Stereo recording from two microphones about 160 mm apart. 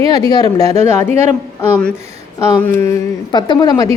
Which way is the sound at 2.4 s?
15° left (ahead or behind).